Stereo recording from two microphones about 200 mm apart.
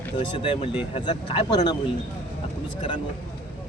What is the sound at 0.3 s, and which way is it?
Speech, 25° left (ahead or behind).